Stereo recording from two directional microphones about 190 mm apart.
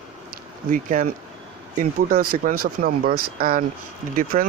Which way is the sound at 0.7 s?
45° right (ahead or behind).